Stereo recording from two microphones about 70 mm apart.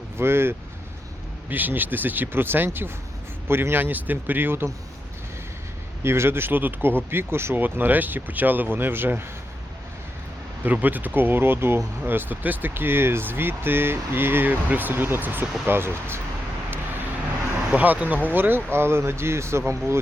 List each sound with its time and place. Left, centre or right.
0.2 s speech: right
1.5 s speech: right
6.0 s speech: right
10.6 s speech: right
17.7 s speech: right